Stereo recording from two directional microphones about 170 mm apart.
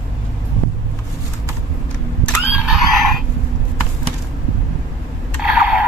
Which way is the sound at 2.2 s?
Centre (ahead or behind).